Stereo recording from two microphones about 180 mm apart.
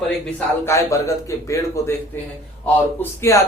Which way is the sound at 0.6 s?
15° left (ahead or behind).